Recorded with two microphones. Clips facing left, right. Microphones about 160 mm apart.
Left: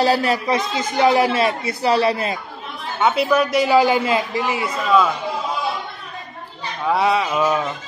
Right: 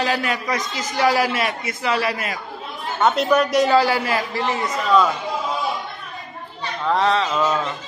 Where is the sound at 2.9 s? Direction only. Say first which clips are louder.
Even; 5° left (ahead or behind).